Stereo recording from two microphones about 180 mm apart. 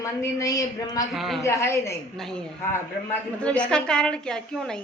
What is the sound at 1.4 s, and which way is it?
Speech, 15° left (ahead or behind).